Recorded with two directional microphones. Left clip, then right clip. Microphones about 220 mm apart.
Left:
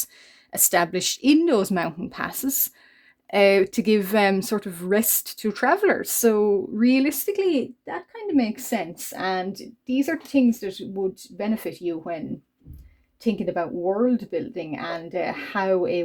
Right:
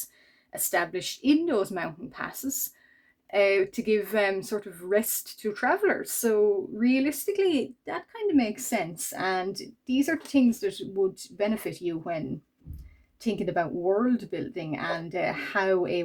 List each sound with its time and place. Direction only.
0.5 s speech: 45° left (ahead or behind)
8.4 s speech: 25° left (ahead or behind)
13.2 s speech: 20° left (ahead or behind)